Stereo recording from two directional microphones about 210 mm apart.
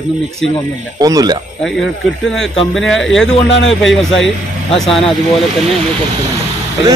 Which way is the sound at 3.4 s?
60° left (ahead or behind).